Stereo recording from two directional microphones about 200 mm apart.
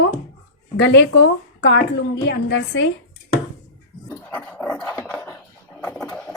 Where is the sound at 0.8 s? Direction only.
60° left (ahead or behind).